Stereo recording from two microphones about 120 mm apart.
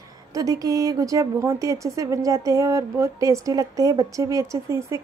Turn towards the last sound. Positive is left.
turn(degrees=-25)  # may be behind; listen again after turning